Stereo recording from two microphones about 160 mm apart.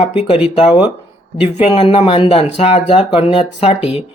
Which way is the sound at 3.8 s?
5° right (ahead or behind).